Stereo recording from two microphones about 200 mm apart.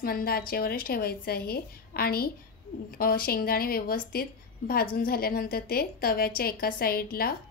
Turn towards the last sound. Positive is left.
turn(degrees=50)  # may be behind; listen again after turning